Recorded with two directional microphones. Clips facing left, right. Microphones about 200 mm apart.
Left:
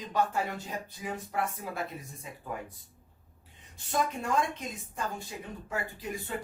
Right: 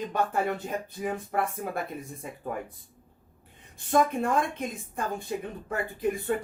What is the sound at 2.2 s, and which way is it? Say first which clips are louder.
Speech: right 5 dB; 50° right (ahead or behind).